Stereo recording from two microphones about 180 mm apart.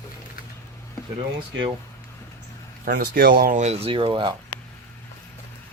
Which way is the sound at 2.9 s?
55° right (ahead or behind).